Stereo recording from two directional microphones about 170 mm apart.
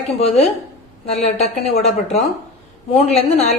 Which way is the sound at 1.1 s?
40° left (ahead or behind).